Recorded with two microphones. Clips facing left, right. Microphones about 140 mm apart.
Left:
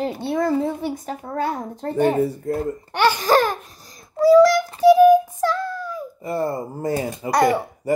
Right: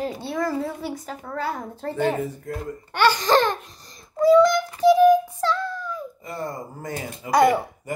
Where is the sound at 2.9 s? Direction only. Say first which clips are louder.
Left 1 dB; 15° left (ahead or behind).